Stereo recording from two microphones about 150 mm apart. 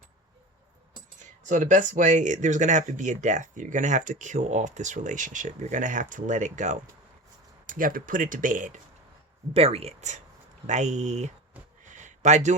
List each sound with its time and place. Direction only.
1.2 s speech: 55° right (ahead or behind)
7.7 s speech: 65° right (ahead or behind)
9.5 s speech: 40° right (ahead or behind)
11.8 s a sound: 55° right (ahead or behind)